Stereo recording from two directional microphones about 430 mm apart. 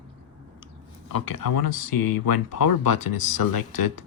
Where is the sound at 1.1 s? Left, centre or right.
Left.